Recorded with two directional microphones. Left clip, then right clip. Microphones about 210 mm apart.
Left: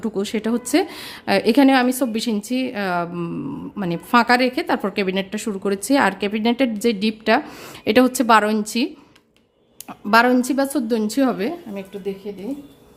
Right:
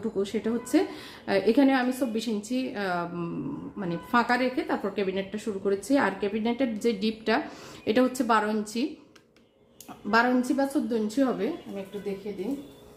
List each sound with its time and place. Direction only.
0.0 s a woman's voice: 50° left (ahead or behind)
10.1 s a woman's voice: 45° left (ahead or behind)